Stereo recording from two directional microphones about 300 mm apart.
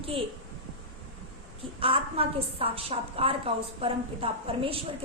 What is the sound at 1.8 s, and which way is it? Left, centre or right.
A woman's voice, centre.